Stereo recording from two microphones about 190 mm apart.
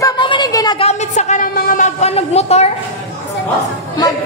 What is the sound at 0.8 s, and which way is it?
A woman's voice, 35° left (ahead or behind).